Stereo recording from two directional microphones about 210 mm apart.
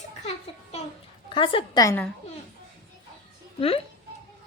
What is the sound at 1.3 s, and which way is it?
Speech, 25° left (ahead or behind).